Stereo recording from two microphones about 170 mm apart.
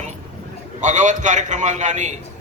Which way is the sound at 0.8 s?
45° right (ahead or behind).